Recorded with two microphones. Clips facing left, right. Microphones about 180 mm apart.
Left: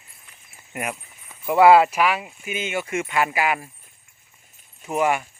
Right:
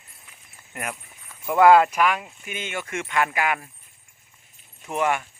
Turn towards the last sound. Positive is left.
turn(degrees=10)  # may be behind; listen again after turning